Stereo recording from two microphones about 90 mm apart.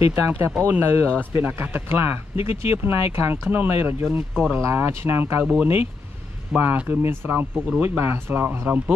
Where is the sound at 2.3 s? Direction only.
90° left.